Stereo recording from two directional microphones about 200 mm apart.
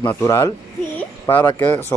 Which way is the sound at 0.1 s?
15° left (ahead or behind).